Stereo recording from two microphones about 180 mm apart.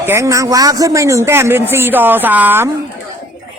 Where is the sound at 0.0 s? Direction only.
15° right (ahead or behind).